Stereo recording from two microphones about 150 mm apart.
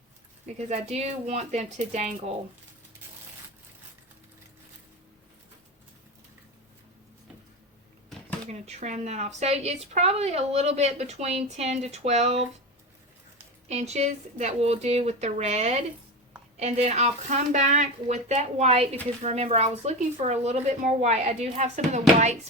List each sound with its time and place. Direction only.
0.4 s speech: 45° right (ahead or behind)
8.4 s speech: 45° right (ahead or behind)
13.7 s speech: 45° right (ahead or behind)